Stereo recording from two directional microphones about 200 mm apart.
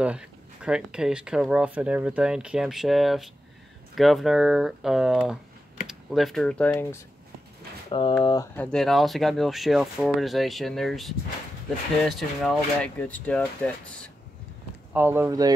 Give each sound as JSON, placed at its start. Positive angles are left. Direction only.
{"t": 0.0, "sound": "speech", "side_deg": -5}
{"t": 8.2, "sound": "speech", "side_deg": 20}
{"t": 8.5, "sound": "speech", "side_deg": 5}
{"t": 15.0, "sound": "speech", "side_deg": -10}